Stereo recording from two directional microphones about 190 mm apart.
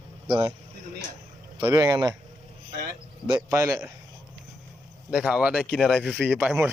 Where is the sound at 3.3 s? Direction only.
15° right (ahead or behind).